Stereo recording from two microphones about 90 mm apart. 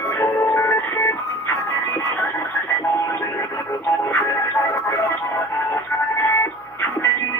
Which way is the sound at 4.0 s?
30° left (ahead or behind).